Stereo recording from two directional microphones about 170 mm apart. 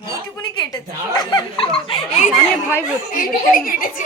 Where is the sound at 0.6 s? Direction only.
25° left (ahead or behind).